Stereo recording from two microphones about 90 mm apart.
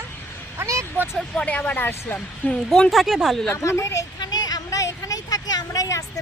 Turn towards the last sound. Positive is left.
turn(degrees=40)  # may be behind; listen again after turning